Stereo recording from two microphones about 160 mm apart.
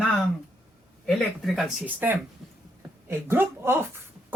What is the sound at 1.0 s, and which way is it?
Speech, centre (ahead or behind).